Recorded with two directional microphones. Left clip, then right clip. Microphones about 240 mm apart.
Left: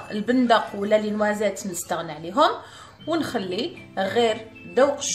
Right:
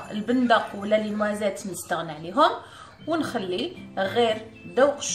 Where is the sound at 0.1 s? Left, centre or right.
Left.